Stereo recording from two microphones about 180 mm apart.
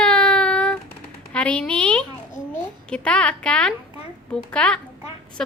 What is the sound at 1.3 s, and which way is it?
Speech, 5° left (ahead or behind).